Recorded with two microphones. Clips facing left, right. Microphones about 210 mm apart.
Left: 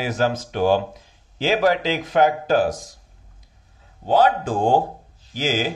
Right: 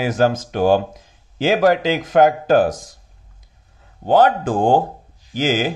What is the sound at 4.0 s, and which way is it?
Speech, 55° right (ahead or behind).